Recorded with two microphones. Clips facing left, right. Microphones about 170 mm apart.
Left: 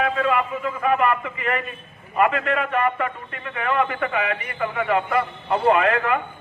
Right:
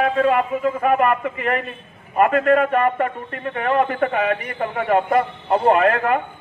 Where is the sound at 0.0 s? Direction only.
40° right (ahead or behind).